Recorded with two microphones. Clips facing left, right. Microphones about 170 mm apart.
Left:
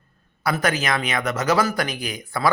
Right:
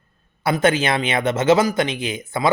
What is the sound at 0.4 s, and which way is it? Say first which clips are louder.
Speech: right 5 dB; 25° right (ahead or behind).